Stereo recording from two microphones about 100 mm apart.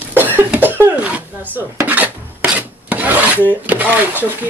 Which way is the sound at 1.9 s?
15° right (ahead or behind).